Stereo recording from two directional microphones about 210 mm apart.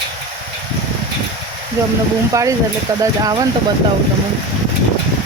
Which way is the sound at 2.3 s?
15° right (ahead or behind).